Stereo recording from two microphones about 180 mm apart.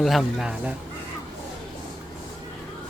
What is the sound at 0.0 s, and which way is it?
Speech, centre (ahead or behind).